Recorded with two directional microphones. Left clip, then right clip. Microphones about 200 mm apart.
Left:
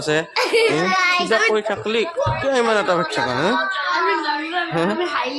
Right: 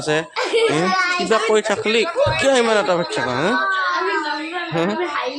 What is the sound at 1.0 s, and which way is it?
Speech, 10° left (ahead or behind).